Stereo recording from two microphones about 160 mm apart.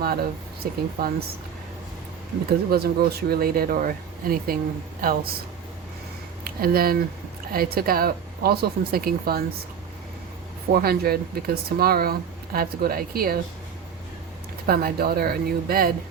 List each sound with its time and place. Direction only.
0.0 s speech: 75° right (ahead or behind)
2.5 s speech: 75° right (ahead or behind)
6.4 s speech: 70° right (ahead or behind)
10.8 s speech: 70° right (ahead or behind)
14.7 s speech: 70° right (ahead or behind)